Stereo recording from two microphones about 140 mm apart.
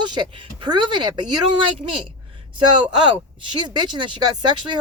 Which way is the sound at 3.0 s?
35° right (ahead or behind).